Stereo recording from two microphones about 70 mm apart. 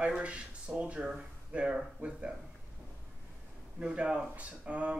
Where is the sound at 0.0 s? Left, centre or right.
Centre.